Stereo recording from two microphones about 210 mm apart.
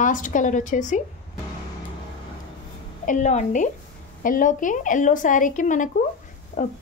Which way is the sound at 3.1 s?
35° left (ahead or behind).